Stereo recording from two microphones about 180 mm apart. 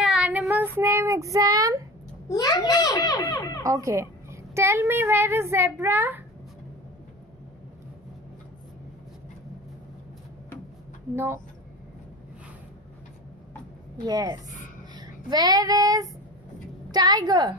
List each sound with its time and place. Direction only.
0.0 s child singing: 5° right (ahead or behind)
2.2 s a child's voice: 20° left (ahead or behind)
3.6 s a woman's voice: 15° right (ahead or behind)
11.1 s a woman's voice: 15° right (ahead or behind)
14.0 s a woman's voice: 20° right (ahead or behind)
15.0 s child singing: 20° right (ahead or behind)
16.9 s a woman's voice: 25° right (ahead or behind)